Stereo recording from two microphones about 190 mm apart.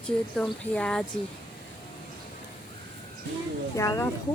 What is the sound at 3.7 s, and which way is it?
Speech, 15° left (ahead or behind).